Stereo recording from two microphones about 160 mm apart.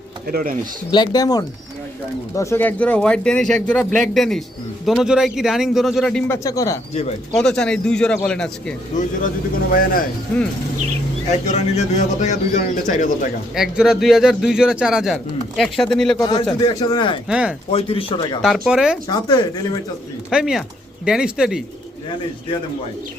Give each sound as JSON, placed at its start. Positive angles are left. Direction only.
{"t": 0.3, "sound": "speech", "side_deg": -60}
{"t": 0.9, "sound": "a man's voice", "side_deg": 25}
{"t": 6.2, "sound": "speech", "side_deg": 20}
{"t": 7.3, "sound": "a man's voice", "side_deg": 5}
{"t": 9.7, "sound": "speech", "side_deg": 65}
{"t": 11.3, "sound": "a man's voice", "side_deg": 45}
{"t": 13.6, "sound": "a man's voice", "side_deg": -5}
{"t": 16.1, "sound": "speech", "side_deg": 25}
{"t": 17.2, "sound": "speech", "side_deg": -5}
{"t": 17.7, "sound": "speech", "side_deg": 35}
{"t": 18.4, "sound": "a man's voice", "side_deg": 0}
{"t": 19.0, "sound": "speech", "side_deg": 25}
{"t": 20.3, "sound": "speech", "side_deg": -5}